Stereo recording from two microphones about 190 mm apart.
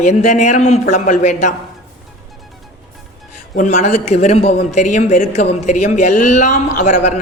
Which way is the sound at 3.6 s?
40° left (ahead or behind).